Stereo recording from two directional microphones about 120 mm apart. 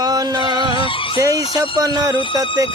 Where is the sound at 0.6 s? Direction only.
45° left (ahead or behind).